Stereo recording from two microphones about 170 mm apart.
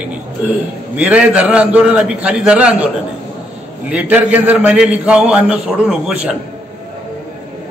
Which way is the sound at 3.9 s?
10° right (ahead or behind).